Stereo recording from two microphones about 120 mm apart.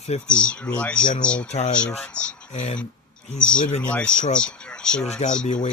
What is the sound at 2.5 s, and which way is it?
Speech, 70° left (ahead or behind).